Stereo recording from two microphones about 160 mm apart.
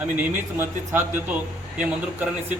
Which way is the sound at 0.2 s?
15° right (ahead or behind).